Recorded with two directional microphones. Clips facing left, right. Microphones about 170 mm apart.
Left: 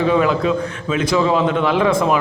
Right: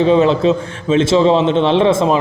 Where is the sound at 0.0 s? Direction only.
25° right (ahead or behind).